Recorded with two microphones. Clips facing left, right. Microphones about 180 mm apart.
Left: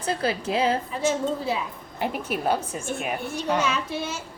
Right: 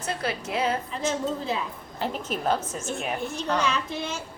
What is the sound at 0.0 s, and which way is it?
Speech, 30° left (ahead or behind).